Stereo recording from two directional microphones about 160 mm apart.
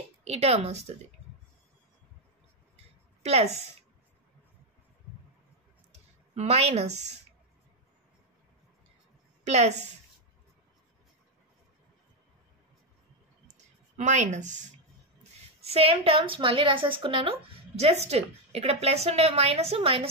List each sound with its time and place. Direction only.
0.2 s a woman's voice: 40° right (ahead or behind)
3.2 s a woman's voice: 40° right (ahead or behind)
6.3 s a woman's voice: 40° right (ahead or behind)
9.4 s a woman's voice: 45° right (ahead or behind)
13.9 s a woman's voice: 50° right (ahead or behind)
15.6 s a woman's voice: 40° right (ahead or behind)